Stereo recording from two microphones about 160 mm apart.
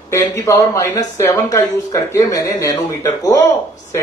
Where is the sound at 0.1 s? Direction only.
20° left (ahead or behind).